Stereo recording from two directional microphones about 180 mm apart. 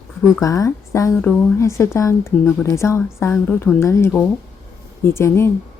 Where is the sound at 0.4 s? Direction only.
20° left (ahead or behind).